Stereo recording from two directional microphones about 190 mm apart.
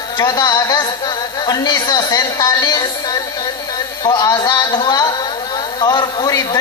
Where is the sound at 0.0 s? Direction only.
20° left (ahead or behind).